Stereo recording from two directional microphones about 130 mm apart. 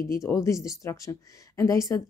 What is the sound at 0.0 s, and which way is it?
Speech, 25° left (ahead or behind).